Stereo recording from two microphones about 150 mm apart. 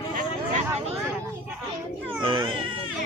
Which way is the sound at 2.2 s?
35° right (ahead or behind).